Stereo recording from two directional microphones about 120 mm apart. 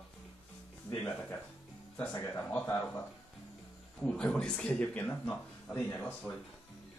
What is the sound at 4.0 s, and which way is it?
Speech, 10° left (ahead or behind).